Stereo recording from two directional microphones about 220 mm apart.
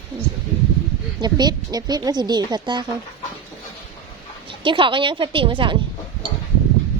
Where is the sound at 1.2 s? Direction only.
20° right (ahead or behind).